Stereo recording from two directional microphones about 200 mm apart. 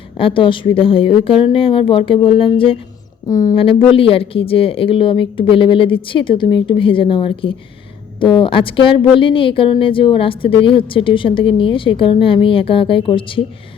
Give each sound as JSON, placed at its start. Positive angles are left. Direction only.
{"t": 0.2, "sound": "a woman's voice", "side_deg": 25}